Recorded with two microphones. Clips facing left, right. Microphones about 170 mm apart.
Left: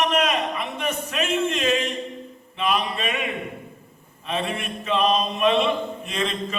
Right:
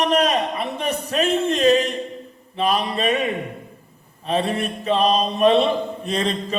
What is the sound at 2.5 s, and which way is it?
Speech, 35° right (ahead or behind).